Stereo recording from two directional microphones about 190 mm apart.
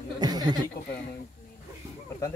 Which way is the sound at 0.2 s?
20° right (ahead or behind).